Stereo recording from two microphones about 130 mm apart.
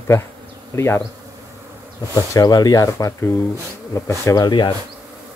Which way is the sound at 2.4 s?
30° left (ahead or behind).